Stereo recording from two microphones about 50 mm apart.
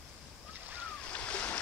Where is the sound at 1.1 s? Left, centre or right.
Left.